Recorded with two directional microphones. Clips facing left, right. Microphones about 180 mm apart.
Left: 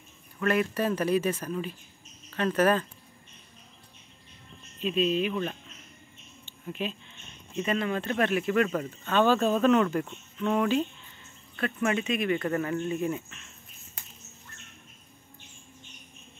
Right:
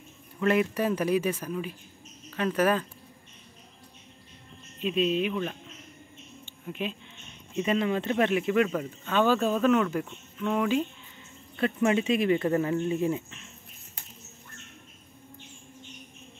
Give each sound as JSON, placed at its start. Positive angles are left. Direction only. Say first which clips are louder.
{"t": 0.4, "sound": "speech", "louder": "right 2 dB", "side_deg": -20}
{"t": 4.8, "sound": "speech", "louder": "even", "side_deg": -10}
{"t": 6.7, "sound": "speech", "louder": "even", "side_deg": -10}
{"t": 8.6, "sound": "speech", "louder": "even", "side_deg": -5}
{"t": 11.5, "sound": "speech", "louder": "right 3 dB", "side_deg": -25}